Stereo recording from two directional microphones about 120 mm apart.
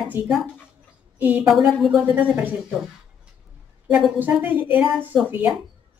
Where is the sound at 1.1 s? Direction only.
15° right (ahead or behind).